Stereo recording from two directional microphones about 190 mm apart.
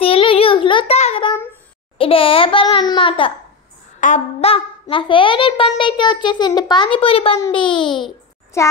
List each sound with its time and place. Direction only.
0.0 s child singing: 30° left (ahead or behind)
2.0 s a child's voice: 30° left (ahead or behind)
8.6 s a sound: 15° left (ahead or behind)